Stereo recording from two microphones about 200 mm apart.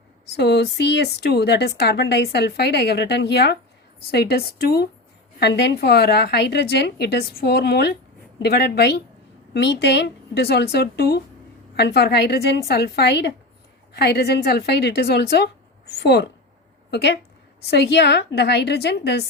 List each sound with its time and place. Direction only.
0.3 s a woman's voice: 55° left (ahead or behind)